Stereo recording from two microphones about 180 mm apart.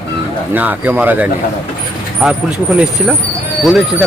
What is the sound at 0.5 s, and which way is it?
Speech, 10° right (ahead or behind).